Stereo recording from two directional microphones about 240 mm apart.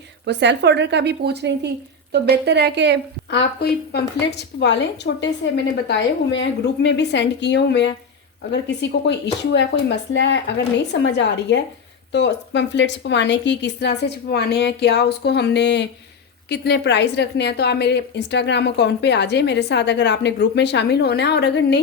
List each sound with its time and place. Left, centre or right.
0.3 s a woman's voice: right
3.2 s a woman's voice: left